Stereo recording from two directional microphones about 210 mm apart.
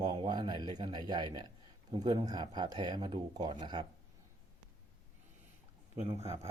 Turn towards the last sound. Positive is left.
turn(degrees=-30)  # may be behind; listen again after turning